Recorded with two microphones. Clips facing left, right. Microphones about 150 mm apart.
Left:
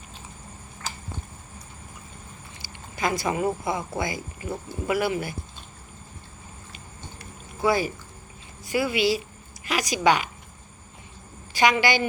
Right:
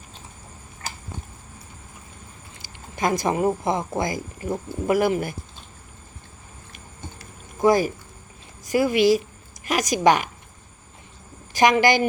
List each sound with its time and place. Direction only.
2.6 s speech: 40° right (ahead or behind)
7.2 s a sound: 45° right (ahead or behind)
8.6 s speech: 45° right (ahead or behind)
11.5 s speech: 45° right (ahead or behind)